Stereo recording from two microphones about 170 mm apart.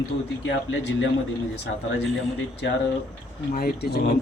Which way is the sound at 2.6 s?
90° left.